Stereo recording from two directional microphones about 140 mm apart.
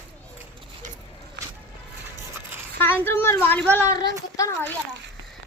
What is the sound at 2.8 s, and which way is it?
Speech, 15° left (ahead or behind).